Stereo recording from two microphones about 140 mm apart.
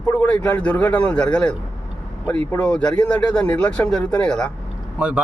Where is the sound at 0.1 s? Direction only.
10° left (ahead or behind).